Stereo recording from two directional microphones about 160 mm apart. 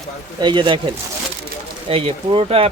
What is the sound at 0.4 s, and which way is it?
Speech, 30° right (ahead or behind).